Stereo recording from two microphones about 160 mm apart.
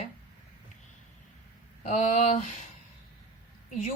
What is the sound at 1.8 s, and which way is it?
Speech, 45° left (ahead or behind).